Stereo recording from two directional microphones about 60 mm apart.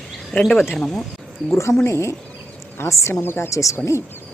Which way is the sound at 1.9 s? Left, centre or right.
Left.